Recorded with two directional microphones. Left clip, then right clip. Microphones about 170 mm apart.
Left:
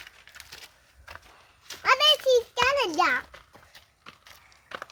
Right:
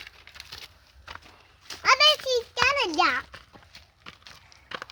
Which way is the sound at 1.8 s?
25° right (ahead or behind).